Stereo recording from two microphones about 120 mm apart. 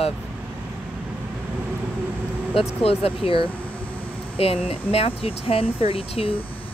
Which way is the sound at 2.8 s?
55° left (ahead or behind).